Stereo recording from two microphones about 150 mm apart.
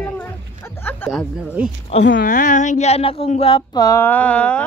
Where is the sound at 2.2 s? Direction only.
60° left (ahead or behind); by 3.6 s 40° left (ahead or behind).